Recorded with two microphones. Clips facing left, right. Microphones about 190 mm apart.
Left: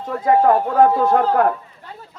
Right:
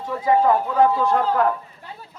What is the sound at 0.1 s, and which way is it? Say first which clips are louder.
Speech: left 3 dB; 50° left (ahead or behind).